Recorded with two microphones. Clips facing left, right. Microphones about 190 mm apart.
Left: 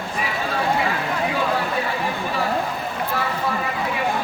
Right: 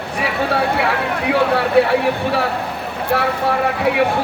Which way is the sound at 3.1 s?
70° right (ahead or behind).